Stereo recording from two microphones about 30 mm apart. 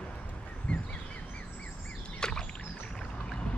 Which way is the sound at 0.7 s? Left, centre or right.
Left.